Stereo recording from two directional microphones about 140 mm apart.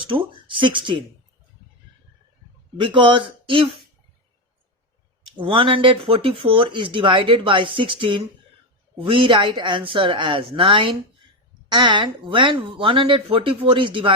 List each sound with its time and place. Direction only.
0.1 s speech: 35° right (ahead or behind)
2.7 s speech: 35° right (ahead or behind)
5.4 s speech: 40° right (ahead or behind)